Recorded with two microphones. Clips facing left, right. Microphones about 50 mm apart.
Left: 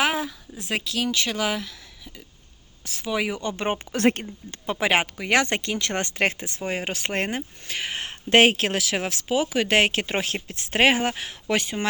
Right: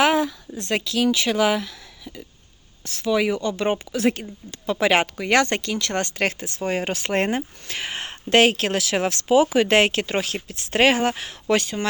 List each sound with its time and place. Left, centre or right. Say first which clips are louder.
0.0 s speech: right 5 dB; centre
2.8 s speech: right 5 dB; centre
3.4 s speech: right 4 dB; left
3.9 s speech: even; left
4.8 s speech: right 3 dB; centre
6.6 s speech: right 4 dB; centre
8.3 s speech: even; centre
9.9 s speech: right 2 dB; centre
10.7 s speech: right 2 dB; centre